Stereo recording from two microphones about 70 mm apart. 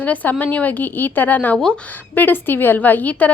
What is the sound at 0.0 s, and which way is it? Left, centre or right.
A woman's voice, left.